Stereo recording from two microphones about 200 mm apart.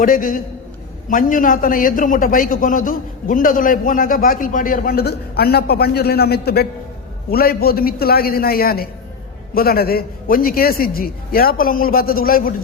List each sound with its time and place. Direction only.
0.0 s a man's voice: 45° left (ahead or behind)